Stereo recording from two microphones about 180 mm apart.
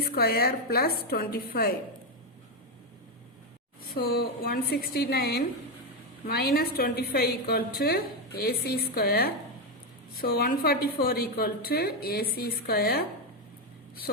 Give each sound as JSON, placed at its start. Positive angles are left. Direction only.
{"t": 0.0, "sound": "a woman's voice", "side_deg": 60}
{"t": 3.9, "sound": "a woman's voice", "side_deg": 55}